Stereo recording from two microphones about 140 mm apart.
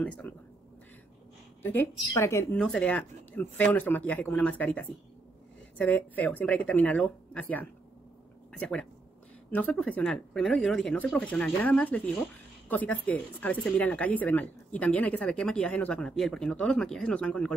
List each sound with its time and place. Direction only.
0.0 s speech: 10° left (ahead or behind)
1.6 s speech: 15° left (ahead or behind)
2.6 s speech: 10° left (ahead or behind)